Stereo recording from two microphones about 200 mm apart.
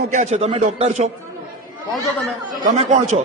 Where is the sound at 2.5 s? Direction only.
35° right (ahead or behind).